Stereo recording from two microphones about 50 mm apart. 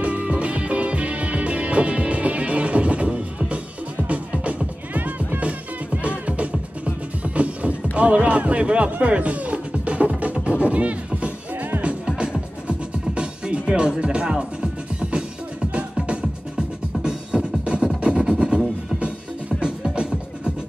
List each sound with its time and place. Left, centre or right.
0.0 s music: right
19.6 s music: right